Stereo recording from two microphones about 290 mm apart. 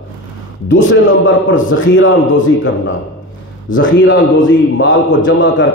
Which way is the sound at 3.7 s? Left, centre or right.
Left.